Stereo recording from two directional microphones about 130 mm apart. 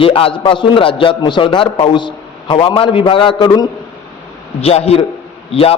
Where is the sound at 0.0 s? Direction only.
45° left (ahead or behind).